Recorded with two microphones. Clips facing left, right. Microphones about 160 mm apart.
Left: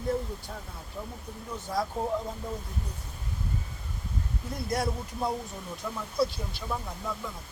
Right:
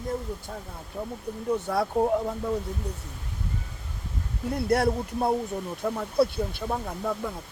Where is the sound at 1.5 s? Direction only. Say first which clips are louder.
Right 5 dB; 65° right (ahead or behind).